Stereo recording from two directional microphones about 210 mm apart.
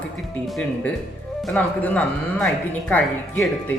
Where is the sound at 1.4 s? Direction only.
5° left (ahead or behind).